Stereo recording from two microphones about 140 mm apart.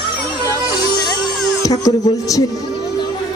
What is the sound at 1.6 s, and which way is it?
Speech, 25° left (ahead or behind).